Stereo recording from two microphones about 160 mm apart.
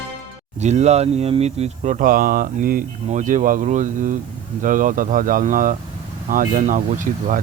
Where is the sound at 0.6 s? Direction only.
45° right (ahead or behind).